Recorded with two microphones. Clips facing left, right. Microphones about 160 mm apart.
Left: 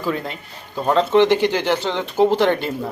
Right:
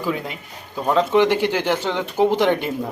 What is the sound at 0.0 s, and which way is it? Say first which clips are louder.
A man's voice: left 1 dB; 10° right (ahead or behind).